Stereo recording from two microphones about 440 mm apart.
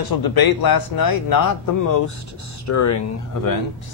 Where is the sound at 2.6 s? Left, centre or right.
Left.